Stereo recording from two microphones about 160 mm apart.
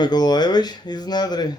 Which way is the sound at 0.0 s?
25° left (ahead or behind).